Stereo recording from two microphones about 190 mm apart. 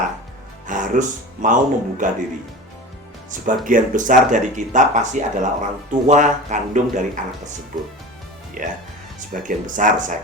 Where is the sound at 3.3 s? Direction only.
45° right (ahead or behind).